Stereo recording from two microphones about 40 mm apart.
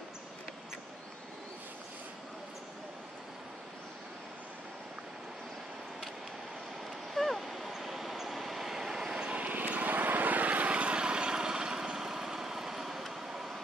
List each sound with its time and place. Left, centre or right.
7.2 s vehicle: centre
9.3 s vehicle: right; by 13.5 s centre